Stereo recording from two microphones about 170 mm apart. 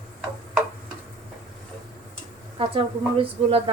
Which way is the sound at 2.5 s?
30° right (ahead or behind).